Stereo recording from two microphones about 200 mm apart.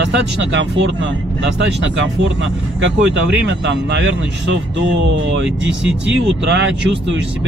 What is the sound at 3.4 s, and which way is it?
Speech, 65° right (ahead or behind).